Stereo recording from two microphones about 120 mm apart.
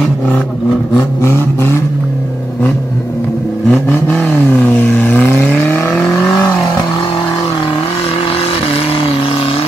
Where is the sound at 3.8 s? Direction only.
15° left (ahead or behind).